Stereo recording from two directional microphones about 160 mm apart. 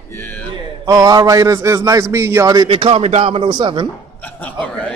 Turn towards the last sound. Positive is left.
turn(degrees=10)  # may be behind; listen again after turning